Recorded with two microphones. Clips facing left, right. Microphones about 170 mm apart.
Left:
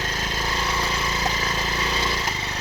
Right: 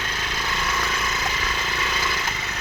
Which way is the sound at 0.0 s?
40° left (ahead or behind).